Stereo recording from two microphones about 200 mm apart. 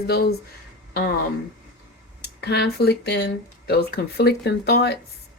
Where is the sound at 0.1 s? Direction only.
50° left (ahead or behind).